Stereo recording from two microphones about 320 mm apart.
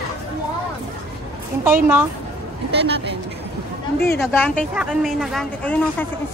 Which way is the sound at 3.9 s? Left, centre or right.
Left.